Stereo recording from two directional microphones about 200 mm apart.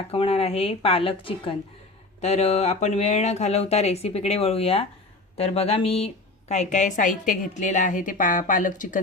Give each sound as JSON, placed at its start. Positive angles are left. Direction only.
{"t": 0.1, "sound": "speech", "side_deg": 30}